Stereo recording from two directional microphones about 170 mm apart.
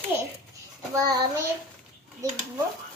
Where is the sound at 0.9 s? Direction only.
20° right (ahead or behind).